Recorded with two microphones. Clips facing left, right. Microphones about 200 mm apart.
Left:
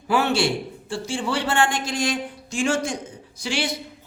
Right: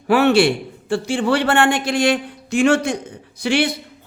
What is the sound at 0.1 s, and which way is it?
A man's voice, 65° right (ahead or behind).